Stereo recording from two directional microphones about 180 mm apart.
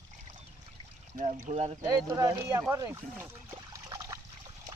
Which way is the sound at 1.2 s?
45° right (ahead or behind).